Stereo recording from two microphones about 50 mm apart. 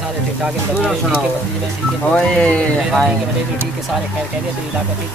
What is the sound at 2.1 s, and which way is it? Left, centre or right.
Speech, centre.